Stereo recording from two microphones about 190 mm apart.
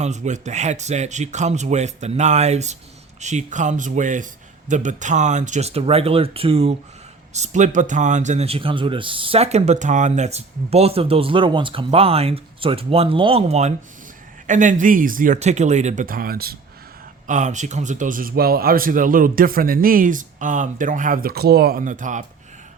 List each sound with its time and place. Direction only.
0.0 s a man's voice: 40° right (ahead or behind)
17.2 s a man's voice: 40° right (ahead or behind)